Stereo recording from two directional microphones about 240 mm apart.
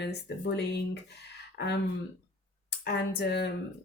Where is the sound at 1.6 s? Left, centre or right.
Left.